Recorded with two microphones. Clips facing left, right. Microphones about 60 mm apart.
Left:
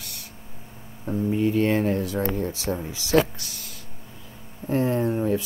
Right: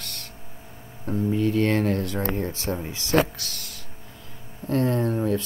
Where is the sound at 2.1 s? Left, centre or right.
Right.